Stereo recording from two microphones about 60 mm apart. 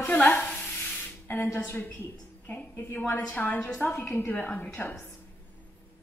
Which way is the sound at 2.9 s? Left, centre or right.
Left.